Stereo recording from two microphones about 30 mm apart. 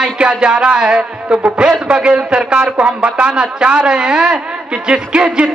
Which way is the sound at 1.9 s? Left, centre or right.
Right.